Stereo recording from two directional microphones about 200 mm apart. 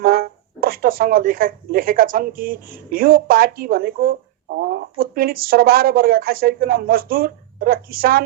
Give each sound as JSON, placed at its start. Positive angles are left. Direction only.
{"t": 0.0, "sound": "speech", "side_deg": -50}